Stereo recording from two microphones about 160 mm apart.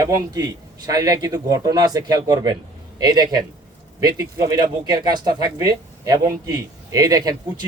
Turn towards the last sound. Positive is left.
turn(degrees=-25)  # may be behind; listen again after turning